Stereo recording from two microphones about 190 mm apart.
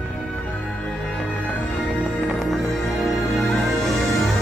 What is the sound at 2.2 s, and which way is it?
Music, centre (ahead or behind).